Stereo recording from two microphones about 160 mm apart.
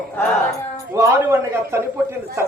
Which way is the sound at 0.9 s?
15° right (ahead or behind).